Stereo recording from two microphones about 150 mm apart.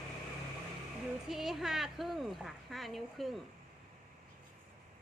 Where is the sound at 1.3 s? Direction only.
Centre (ahead or behind).